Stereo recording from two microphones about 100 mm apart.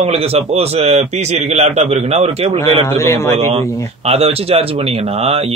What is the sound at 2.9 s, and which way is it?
Speech, 30° left (ahead or behind).